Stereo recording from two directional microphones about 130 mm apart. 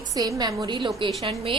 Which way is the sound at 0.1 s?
30° right (ahead or behind).